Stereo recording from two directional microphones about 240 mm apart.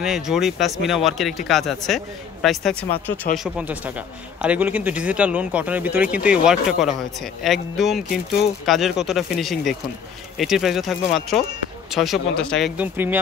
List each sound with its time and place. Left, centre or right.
0.0 s speech: centre